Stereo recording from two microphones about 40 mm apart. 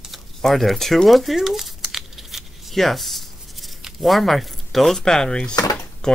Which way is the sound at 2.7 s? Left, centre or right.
Centre.